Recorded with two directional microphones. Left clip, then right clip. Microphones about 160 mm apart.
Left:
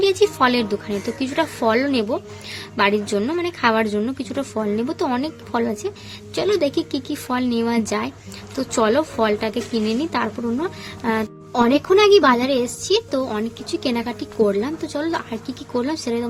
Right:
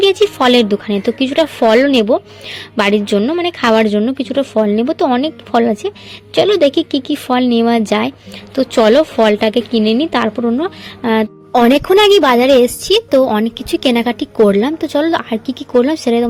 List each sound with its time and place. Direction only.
0.0 s a woman's voice: 35° right (ahead or behind)
11.5 s a woman's voice: 50° right (ahead or behind)